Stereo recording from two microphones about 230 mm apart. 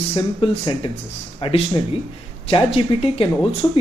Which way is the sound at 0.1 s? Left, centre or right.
Left.